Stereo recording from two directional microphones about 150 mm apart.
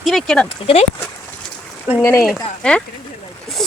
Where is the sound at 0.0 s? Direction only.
Centre (ahead or behind).